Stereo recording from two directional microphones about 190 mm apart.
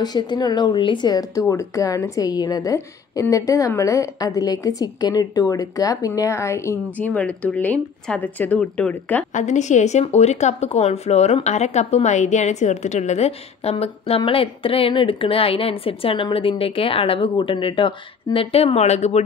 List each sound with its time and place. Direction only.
0.0 s speech: 20° left (ahead or behind); by 9.2 s 5° left (ahead or behind)
9.3 s speech: 40° left (ahead or behind)